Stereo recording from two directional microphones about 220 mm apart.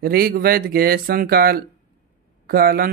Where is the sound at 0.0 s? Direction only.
45° right (ahead or behind).